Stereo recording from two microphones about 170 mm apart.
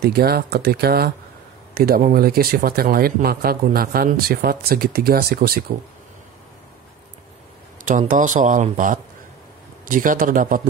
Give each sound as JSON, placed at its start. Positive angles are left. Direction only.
{"t": 0.0, "sound": "a man's voice", "side_deg": -65}
{"t": 7.8, "sound": "speech", "side_deg": -50}